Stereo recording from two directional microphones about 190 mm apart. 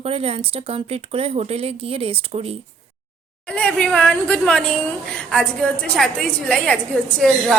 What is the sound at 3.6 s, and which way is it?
A woman's voice, 5° left (ahead or behind).